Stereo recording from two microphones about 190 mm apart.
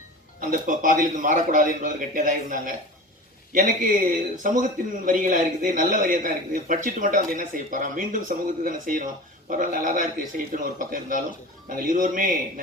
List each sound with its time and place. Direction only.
0.3 s a man's voice: 45° right (ahead or behind)